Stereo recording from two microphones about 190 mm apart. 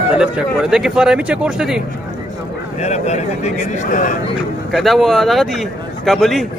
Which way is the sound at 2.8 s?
35° left (ahead or behind).